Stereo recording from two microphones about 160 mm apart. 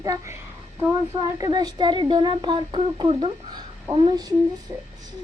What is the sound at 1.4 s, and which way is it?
Speech, 25° right (ahead or behind).